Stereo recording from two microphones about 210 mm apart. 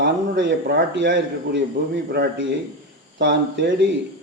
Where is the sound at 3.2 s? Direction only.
60° right (ahead or behind).